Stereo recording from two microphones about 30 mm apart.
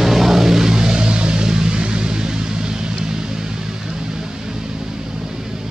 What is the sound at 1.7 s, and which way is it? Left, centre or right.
Music, right.